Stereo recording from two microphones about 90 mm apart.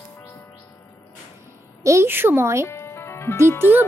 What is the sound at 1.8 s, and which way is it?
Speech, 30° right (ahead or behind).